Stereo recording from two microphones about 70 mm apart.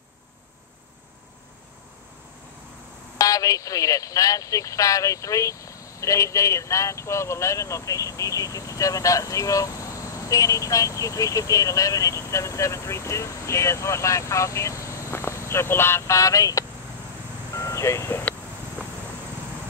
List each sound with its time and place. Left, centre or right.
3.2 s speech: left
17.6 s vehicle: left